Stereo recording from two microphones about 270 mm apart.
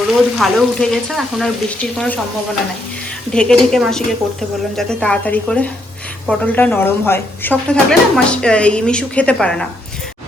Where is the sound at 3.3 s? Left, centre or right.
Centre.